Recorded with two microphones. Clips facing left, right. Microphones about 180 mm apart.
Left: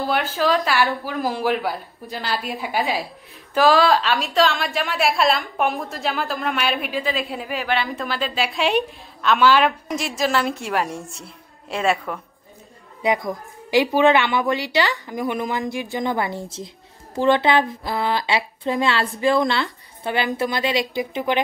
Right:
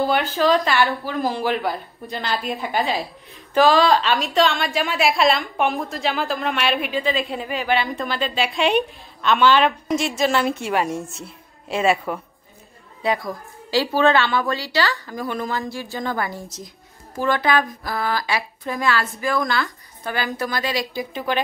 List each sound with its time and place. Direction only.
0.0 s a woman's voice: centre (ahead or behind)
13.0 s a woman's voice: 20° left (ahead or behind)